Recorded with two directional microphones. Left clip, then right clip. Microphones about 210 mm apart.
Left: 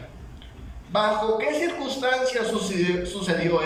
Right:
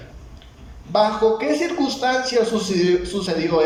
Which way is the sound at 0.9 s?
25° right (ahead or behind).